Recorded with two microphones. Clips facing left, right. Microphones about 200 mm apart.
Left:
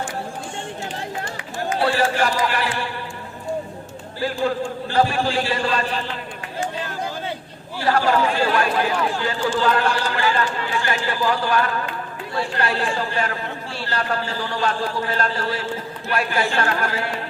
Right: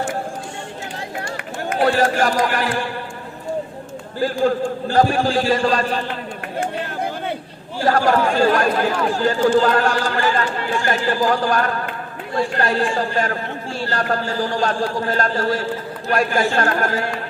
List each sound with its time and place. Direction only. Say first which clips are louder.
1.4 s speech: right 2 dB; 55° right (ahead or behind)
4.2 s a man's voice: right 4 dB; 45° right (ahead or behind)
6.6 s speech: right 3 dB; 60° right (ahead or behind)
7.8 s a man's voice: right 2 dB; 45° right (ahead or behind)